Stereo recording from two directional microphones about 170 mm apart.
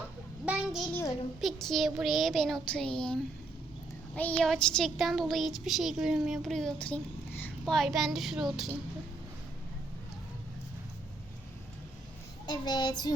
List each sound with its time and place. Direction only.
0.4 s a sound: 5° right (ahead or behind)
1.4 s speech: centre (ahead or behind)
12.5 s child singing: 25° left (ahead or behind)